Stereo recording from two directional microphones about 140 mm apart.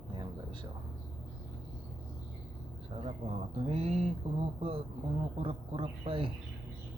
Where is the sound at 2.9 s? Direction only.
50° right (ahead or behind).